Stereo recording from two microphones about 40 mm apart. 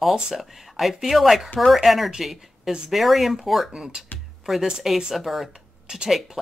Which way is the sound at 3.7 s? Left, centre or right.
Centre.